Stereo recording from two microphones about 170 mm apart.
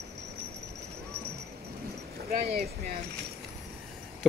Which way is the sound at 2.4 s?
65° right (ahead or behind).